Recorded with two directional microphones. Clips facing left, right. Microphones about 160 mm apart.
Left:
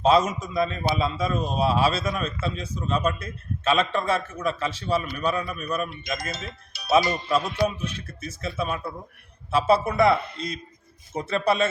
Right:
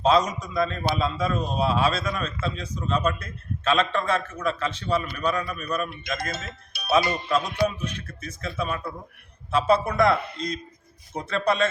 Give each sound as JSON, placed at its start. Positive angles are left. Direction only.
{"t": 0.0, "sound": "a man's voice", "side_deg": 5}
{"t": 6.3, "sound": "speech", "side_deg": -55}
{"t": 7.1, "sound": "a man's voice", "side_deg": 5}
{"t": 7.5, "sound": "a man's voice", "side_deg": -55}
{"t": 8.2, "sound": "a man's voice", "side_deg": 10}